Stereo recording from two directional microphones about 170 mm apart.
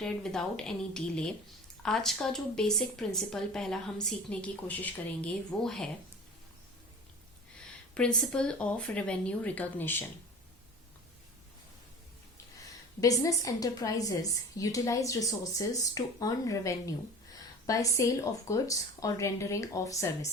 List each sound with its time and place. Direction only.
0.0 s speech: 5° left (ahead or behind)
7.9 s speech: 5° left (ahead or behind)
13.0 s a woman's voice: 20° left (ahead or behind)